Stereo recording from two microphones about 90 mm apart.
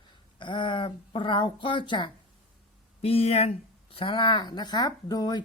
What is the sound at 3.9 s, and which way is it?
Speech, 70° left (ahead or behind).